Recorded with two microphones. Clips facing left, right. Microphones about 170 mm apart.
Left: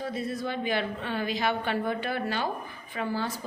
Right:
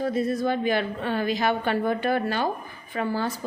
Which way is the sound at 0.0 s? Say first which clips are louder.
Right 7 dB; 45° right (ahead or behind).